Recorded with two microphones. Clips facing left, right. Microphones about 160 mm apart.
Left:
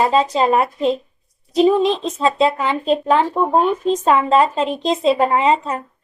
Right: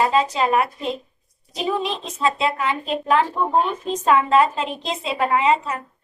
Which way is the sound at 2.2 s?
35° left (ahead or behind).